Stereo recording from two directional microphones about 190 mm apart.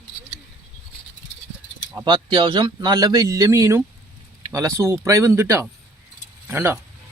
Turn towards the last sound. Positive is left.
turn(degrees=-10)  # may be behind; listen again after turning